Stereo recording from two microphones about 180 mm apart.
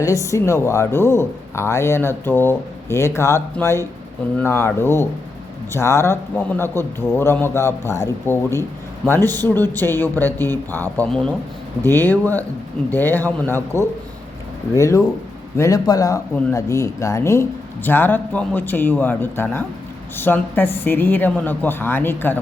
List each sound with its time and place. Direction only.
0.0 s speech: 15° left (ahead or behind)